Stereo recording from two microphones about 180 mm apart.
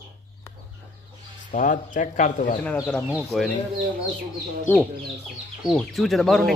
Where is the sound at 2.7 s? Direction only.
10° left (ahead or behind).